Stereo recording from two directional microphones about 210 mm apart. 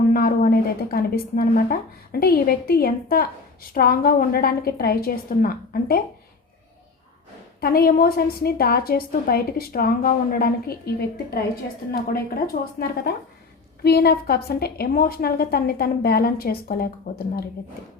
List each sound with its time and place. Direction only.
0.1 s a woman's voice: 45° left (ahead or behind)
7.6 s a woman's voice: 45° left (ahead or behind)